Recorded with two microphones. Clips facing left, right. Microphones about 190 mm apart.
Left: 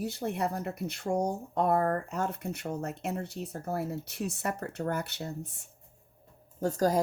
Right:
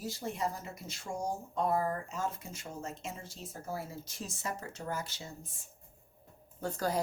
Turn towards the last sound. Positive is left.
turn(degrees=40)  # may be behind; listen again after turning